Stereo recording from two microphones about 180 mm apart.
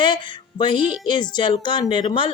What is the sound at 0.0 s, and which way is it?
A woman's voice, 25° left (ahead or behind).